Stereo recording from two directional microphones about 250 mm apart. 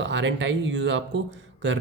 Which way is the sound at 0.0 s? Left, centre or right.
Right.